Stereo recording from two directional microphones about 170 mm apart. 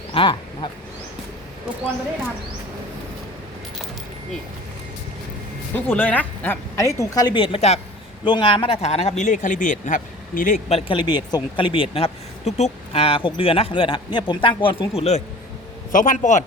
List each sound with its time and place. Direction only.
0.1 s duck: 30° left (ahead or behind)
5.7 s a man's voice: 10° left (ahead or behind); by 10.6 s 50° left (ahead or behind)
10.7 s speech: 35° left (ahead or behind)
15.9 s a man's voice: 50° left (ahead or behind)